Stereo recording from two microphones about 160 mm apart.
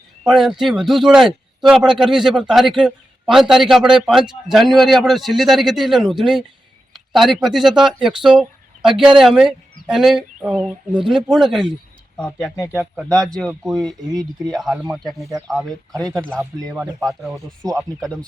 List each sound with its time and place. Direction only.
0.3 s a man's voice: 5° right (ahead or behind)
12.5 s speech: 20° left (ahead or behind)
12.8 s a man's voice: 5° left (ahead or behind)
17.0 s a man's voice: centre (ahead or behind)